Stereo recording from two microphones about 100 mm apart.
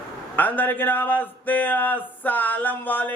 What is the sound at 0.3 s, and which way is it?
A man's voice, 20° left (ahead or behind).